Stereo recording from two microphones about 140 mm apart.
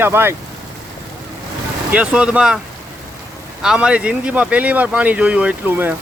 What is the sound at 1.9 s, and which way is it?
Speech, 10° right (ahead or behind).